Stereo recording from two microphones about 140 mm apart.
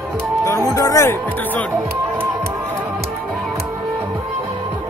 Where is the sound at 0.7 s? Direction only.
25° left (ahead or behind).